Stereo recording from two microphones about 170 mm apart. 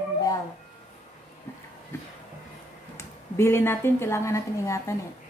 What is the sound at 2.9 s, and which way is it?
A woman's voice, 15° left (ahead or behind).